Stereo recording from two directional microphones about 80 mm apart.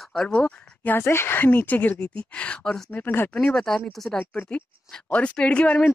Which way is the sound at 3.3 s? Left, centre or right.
Centre.